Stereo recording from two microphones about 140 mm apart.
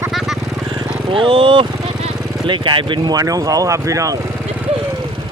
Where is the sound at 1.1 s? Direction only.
40° right (ahead or behind); by 4.1 s 25° right (ahead or behind).